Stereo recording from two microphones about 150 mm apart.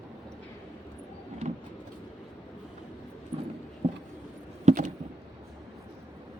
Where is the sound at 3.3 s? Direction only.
35° right (ahead or behind).